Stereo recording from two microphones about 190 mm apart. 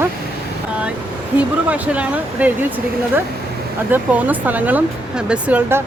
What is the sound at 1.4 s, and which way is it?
Speech, 5° right (ahead or behind).